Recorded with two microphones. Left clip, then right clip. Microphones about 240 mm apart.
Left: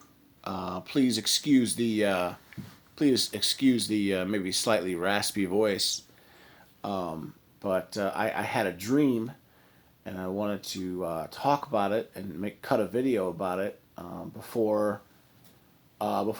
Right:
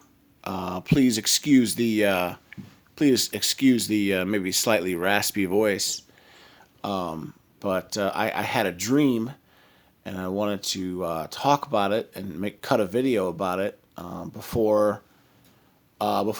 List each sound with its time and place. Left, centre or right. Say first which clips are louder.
0.4 s speech: right 5 dB; right
16.0 s speech: right 5 dB; right